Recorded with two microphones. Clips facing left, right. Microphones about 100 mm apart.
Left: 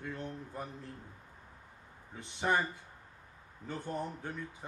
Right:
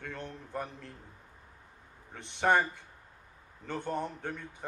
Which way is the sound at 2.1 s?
65° right (ahead or behind).